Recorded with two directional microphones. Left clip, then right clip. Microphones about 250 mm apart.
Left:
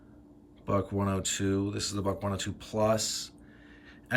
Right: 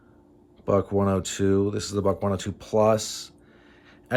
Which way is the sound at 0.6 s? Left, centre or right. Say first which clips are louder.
Right 8 dB; centre.